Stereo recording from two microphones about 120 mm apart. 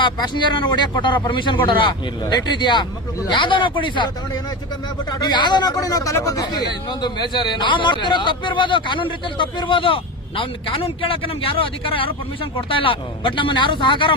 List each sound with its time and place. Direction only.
0.0 s speech: 40° left (ahead or behind)